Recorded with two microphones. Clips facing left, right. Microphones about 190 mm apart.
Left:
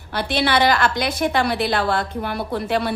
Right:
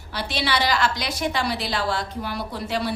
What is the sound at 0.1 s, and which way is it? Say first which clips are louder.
A woman's voice: left 6 dB; 55° left (ahead or behind).